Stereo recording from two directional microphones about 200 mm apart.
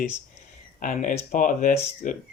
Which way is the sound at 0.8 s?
40° left (ahead or behind).